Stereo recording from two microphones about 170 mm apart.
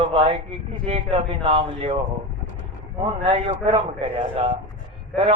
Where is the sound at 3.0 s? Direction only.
35° right (ahead or behind).